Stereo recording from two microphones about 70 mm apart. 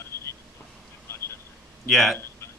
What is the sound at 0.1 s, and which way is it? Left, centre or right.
Vehicle, left.